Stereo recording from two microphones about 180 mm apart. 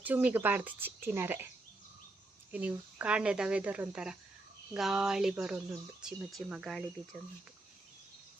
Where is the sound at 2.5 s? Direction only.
10° right (ahead or behind).